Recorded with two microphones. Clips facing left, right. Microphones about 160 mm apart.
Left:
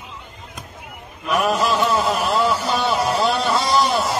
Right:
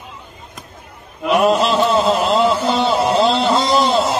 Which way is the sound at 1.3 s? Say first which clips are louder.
Right 5 dB; 25° right (ahead or behind).